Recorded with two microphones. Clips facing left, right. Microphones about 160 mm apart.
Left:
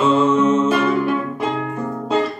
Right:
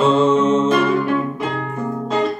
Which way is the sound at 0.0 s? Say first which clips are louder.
Right 1 dB; 30° right (ahead or behind).